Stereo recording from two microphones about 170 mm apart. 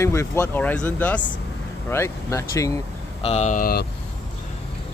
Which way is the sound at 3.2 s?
40° left (ahead or behind).